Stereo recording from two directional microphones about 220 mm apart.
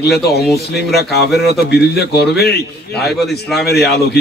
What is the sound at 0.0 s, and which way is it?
Speech, 45° left (ahead or behind).